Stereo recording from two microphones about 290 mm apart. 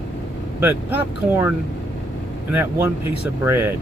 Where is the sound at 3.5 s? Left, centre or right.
Centre.